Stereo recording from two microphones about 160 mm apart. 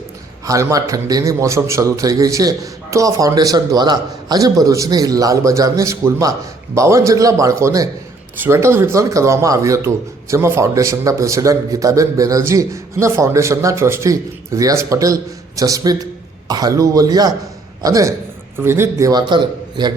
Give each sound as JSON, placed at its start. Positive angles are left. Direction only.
{"t": 0.4, "sound": "speech", "side_deg": -20}